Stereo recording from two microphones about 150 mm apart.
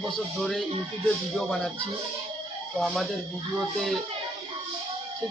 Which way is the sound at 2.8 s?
Centre (ahead or behind).